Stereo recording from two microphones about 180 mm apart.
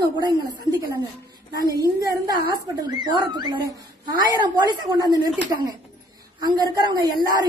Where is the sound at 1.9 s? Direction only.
20° right (ahead or behind).